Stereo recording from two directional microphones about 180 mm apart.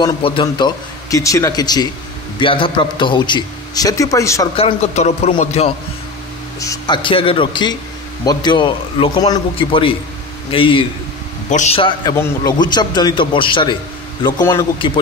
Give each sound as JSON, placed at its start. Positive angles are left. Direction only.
{"t": 0.0, "sound": "a man's voice", "side_deg": 30}
{"t": 4.6, "sound": "a man's voice", "side_deg": 35}
{"t": 6.6, "sound": "a man's voice", "side_deg": 20}
{"t": 11.5, "sound": "a man's voice", "side_deg": 40}
{"t": 11.8, "sound": "a man's voice", "side_deg": 20}
{"t": 14.2, "sound": "a man's voice", "side_deg": 15}